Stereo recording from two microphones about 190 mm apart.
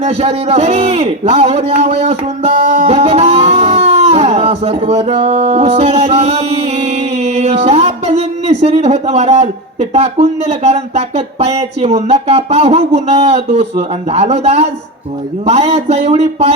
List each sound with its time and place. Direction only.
0.0 s a man's voice: 35° right (ahead or behind)